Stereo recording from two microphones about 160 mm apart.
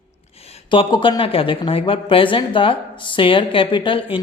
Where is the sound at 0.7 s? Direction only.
30° left (ahead or behind).